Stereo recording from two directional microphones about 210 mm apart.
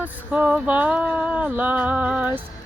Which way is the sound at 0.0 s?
5° right (ahead or behind).